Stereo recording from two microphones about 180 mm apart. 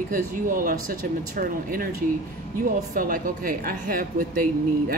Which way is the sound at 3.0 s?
50° right (ahead or behind).